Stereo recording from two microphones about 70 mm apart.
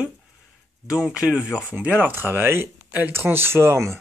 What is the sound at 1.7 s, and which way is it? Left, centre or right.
Speech, right.